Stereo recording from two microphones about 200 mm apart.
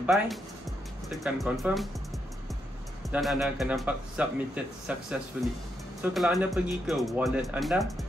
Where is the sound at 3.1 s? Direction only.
Centre (ahead or behind).